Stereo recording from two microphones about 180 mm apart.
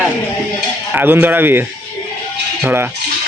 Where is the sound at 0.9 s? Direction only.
10° right (ahead or behind).